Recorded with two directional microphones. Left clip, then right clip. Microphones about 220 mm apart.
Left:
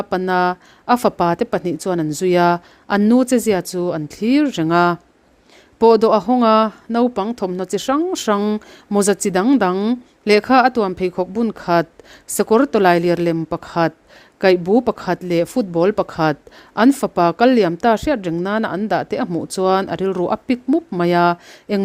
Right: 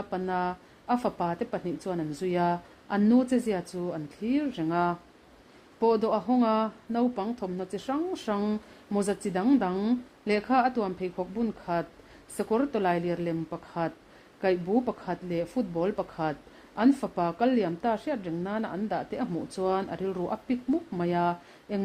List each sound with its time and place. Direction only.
0.0 s speech: 40° left (ahead or behind)